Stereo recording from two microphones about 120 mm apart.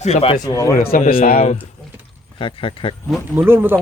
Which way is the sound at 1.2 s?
65° left (ahead or behind).